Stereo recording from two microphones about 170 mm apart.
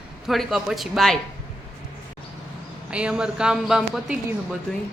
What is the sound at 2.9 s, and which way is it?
Speech, 5° right (ahead or behind).